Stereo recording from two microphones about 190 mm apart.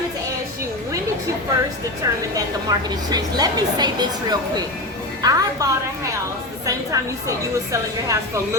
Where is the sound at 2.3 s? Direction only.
20° right (ahead or behind).